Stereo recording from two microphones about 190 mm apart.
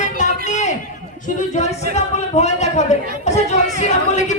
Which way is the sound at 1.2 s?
40° left (ahead or behind).